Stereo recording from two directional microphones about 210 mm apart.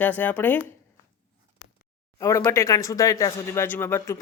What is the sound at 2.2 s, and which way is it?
Speech, 15° left (ahead or behind).